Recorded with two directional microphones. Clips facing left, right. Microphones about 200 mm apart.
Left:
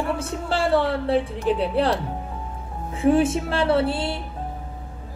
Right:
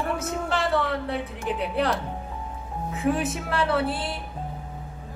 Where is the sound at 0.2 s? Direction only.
30° left (ahead or behind).